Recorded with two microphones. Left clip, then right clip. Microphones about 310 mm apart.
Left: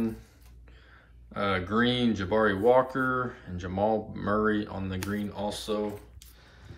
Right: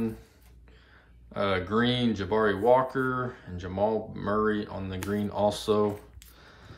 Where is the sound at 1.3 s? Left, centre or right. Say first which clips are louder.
Right 1 dB; centre.